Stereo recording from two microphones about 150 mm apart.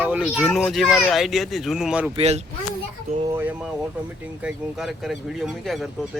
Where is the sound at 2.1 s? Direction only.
45° right (ahead or behind).